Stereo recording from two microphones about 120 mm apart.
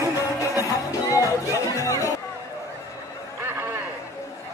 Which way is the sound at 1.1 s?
25° left (ahead or behind).